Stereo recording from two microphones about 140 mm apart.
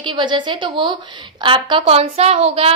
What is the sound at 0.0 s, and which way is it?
A woman's voice, 35° right (ahead or behind).